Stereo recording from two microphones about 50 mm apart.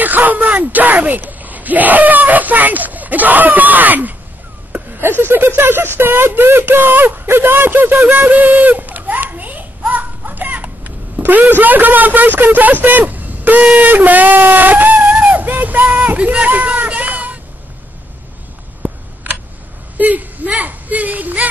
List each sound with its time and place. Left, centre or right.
0.0 s speech: right
4.9 s speech: right
8.3 s a sound: right
12.8 s speech: right
20.0 s speech: right